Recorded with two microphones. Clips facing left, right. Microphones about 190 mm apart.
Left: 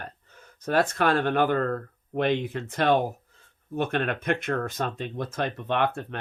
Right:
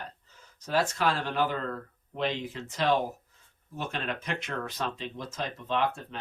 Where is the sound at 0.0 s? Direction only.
55° left (ahead or behind).